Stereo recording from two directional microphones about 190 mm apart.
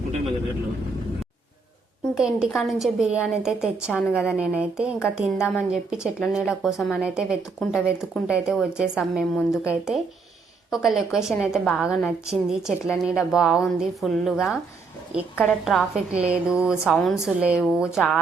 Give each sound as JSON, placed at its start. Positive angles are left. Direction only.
{"t": 2.1, "sound": "a woman's voice", "side_deg": -5}